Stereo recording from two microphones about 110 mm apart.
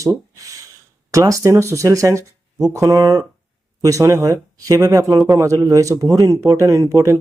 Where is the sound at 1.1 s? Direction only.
30° right (ahead or behind).